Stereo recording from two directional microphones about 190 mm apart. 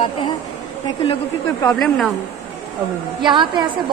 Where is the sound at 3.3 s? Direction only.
25° right (ahead or behind).